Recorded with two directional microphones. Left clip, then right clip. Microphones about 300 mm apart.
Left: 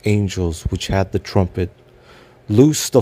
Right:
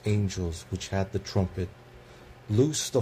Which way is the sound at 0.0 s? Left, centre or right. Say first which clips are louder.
Left 11 dB; left.